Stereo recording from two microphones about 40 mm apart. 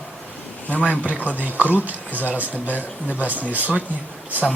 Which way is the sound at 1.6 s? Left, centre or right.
Left.